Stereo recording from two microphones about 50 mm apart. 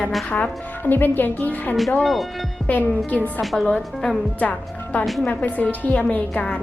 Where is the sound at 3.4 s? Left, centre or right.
Centre.